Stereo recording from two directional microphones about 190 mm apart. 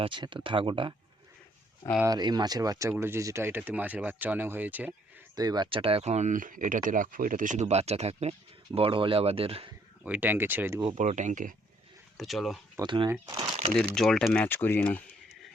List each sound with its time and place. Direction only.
0.0 s speech: 25° right (ahead or behind)
2.0 s speech: 20° right (ahead or behind)
5.4 s speech: 20° right (ahead or behind)
10.0 s speech: 10° right (ahead or behind)
10.9 s speech: 40° right (ahead or behind)
12.1 s speech: centre (ahead or behind)
12.7 s speech: 25° right (ahead or behind)
13.9 s speech: 5° left (ahead or behind)